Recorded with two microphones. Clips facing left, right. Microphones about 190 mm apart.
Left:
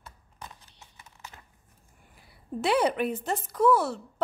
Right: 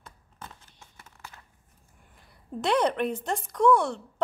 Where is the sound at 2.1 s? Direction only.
5° left (ahead or behind).